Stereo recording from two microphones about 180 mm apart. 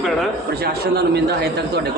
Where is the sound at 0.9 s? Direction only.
65° right (ahead or behind).